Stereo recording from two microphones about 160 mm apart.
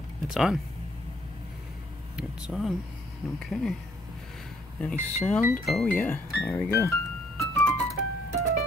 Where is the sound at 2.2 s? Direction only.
5° right (ahead or behind).